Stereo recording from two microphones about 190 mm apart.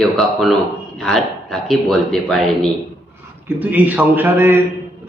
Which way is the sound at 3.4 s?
10° right (ahead or behind).